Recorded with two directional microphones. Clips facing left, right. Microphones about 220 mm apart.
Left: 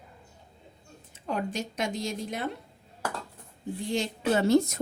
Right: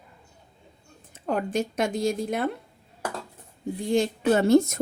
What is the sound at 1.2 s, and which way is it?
Speech, 55° right (ahead or behind).